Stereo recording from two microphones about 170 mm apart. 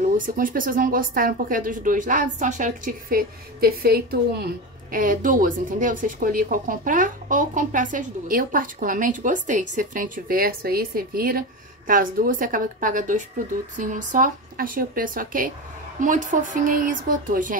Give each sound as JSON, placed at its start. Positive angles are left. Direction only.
{"t": 0.4, "sound": "speech", "side_deg": -55}